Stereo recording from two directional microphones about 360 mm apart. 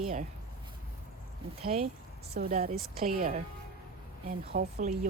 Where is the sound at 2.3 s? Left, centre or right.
Right.